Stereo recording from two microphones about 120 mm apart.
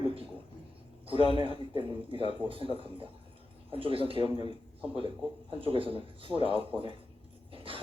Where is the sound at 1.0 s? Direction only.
45° right (ahead or behind).